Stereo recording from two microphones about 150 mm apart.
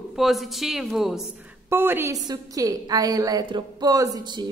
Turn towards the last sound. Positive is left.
turn(degrees=-30)  # may be behind; listen again after turning